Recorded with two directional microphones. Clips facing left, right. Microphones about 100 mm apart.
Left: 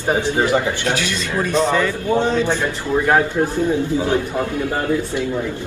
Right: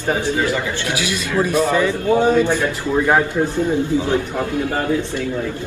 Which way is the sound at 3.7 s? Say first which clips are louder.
Even; 20° left (ahead or behind).